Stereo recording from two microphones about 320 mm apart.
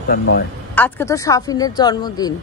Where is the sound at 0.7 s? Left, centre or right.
Centre.